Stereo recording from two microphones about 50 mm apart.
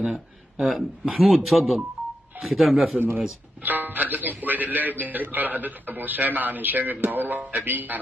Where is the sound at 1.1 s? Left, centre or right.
Centre.